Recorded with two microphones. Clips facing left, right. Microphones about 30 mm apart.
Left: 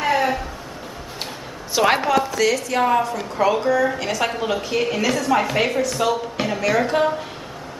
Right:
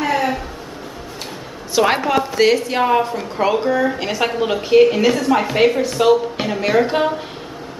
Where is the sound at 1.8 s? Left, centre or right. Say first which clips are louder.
Right 2 dB; centre.